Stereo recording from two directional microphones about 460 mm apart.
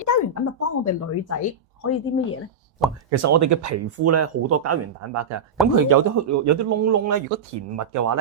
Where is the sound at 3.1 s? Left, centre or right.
Right.